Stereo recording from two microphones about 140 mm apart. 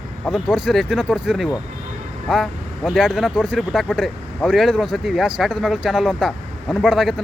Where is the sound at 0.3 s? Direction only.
5° right (ahead or behind).